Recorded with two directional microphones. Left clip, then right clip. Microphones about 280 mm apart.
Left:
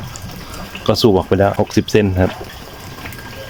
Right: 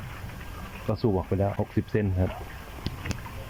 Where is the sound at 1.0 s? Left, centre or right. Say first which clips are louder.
Left 14 dB; left.